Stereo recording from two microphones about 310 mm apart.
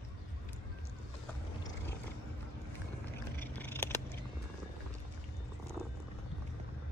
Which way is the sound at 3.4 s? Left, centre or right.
Centre.